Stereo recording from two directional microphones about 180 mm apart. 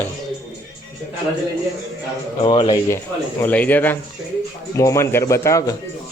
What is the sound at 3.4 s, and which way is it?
Speech, 10° left (ahead or behind).